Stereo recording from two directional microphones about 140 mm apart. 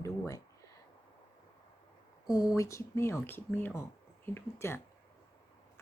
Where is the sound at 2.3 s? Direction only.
25° left (ahead or behind).